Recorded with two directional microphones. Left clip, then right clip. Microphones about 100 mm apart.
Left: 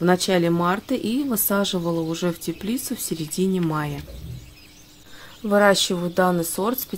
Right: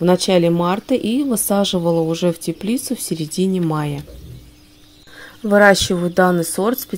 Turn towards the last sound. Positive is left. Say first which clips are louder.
# right 5 dB
turn(degrees=-40)  # may be behind; listen again after turning